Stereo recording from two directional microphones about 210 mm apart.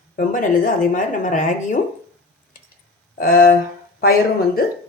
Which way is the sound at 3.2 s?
45° left (ahead or behind).